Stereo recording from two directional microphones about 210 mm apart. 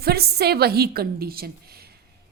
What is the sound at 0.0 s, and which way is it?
A woman's voice, 50° right (ahead or behind).